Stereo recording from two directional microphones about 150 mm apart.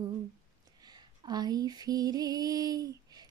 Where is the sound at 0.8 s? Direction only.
25° right (ahead or behind).